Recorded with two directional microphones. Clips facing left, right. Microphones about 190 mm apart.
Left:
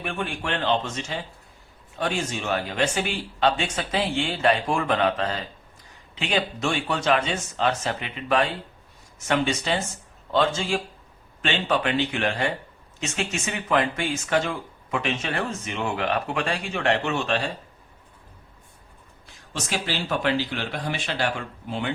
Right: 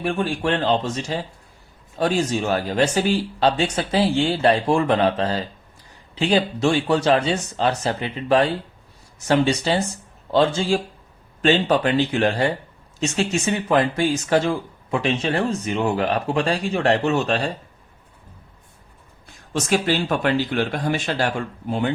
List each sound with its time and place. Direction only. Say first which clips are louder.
0.0 s speech: right 7 dB; 35° right (ahead or behind)
19.5 s speech: right 8 dB; 50° right (ahead or behind)